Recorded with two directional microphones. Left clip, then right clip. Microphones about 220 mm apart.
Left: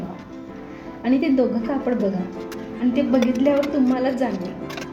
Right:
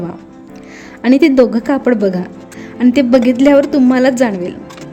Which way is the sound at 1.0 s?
45° right (ahead or behind).